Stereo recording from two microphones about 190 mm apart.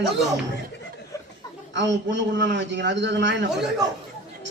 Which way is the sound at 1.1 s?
20° left (ahead or behind).